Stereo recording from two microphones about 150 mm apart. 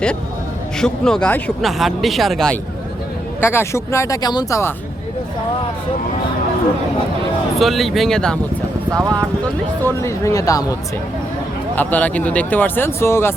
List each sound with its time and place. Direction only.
0.8 s speech: 5° left (ahead or behind)
3.4 s speech: 15° left (ahead or behind)
7.6 s speech: centre (ahead or behind)
8.9 s speech: 20° right (ahead or behind)
9.4 s speech: 15° left (ahead or behind)
11.8 s speech: 10° left (ahead or behind)